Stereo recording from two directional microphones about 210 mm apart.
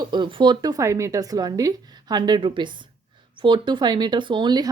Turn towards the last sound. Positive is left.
turn(degrees=-20)  # may be behind; listen again after turning